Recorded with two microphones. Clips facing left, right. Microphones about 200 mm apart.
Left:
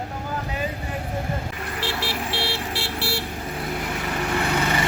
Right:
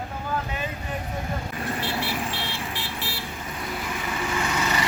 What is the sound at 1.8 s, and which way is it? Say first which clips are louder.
Vehicle: left 3 dB; 90° left.